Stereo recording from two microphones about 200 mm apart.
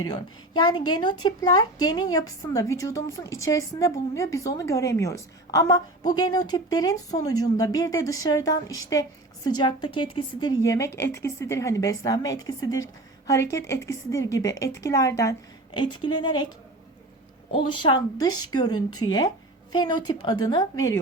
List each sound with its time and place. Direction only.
0.0 s a woman's voice: 20° left (ahead or behind)
17.5 s speech: 25° left (ahead or behind)